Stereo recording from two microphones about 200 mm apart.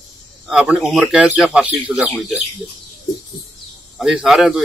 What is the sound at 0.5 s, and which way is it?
A man's voice, centre (ahead or behind).